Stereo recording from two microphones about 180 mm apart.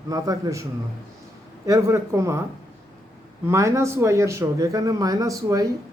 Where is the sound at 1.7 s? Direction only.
15° right (ahead or behind).